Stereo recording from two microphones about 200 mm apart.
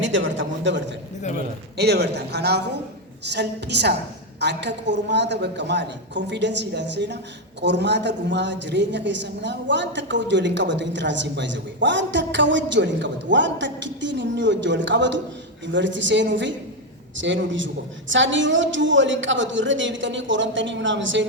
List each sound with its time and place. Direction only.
0.0 s a woman's voice: 65° right (ahead or behind)
1.2 s a man's voice: 35° left (ahead or behind)
1.7 s a woman's voice: 55° right (ahead or behind)